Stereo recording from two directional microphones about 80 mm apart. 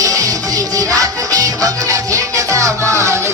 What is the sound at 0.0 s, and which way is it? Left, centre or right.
Music, right.